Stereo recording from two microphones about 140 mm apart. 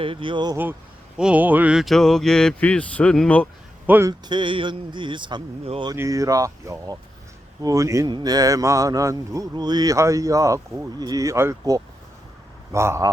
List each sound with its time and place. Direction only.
0.0 s speech: 40° right (ahead or behind)
0.5 s speech: 15° right (ahead or behind); by 3.5 s 10° left (ahead or behind)
3.8 s speech: 15° right (ahead or behind)
4.3 s speech: 35° right (ahead or behind)
5.9 s speech: 25° right (ahead or behind)